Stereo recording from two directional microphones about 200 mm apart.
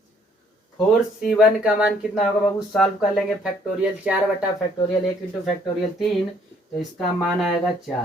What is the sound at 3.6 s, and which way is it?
Speech, 5° right (ahead or behind).